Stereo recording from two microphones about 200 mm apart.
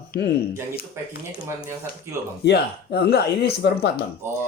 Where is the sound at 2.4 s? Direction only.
55° left (ahead or behind).